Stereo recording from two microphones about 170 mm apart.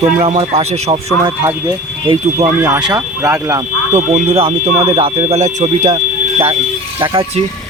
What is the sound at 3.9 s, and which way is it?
Speech, 45° right (ahead or behind).